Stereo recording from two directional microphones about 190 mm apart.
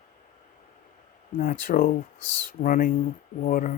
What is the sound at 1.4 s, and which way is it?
Speech, 45° left (ahead or behind).